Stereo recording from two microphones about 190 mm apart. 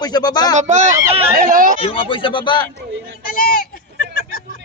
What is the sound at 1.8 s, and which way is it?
Speech, 30° left (ahead or behind).